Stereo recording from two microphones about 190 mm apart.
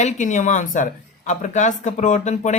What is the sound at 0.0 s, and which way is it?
Speech, 40° left (ahead or behind).